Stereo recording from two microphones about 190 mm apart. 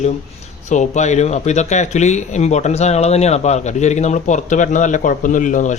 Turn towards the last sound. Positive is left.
turn(degrees=40)  # may be behind; listen again after turning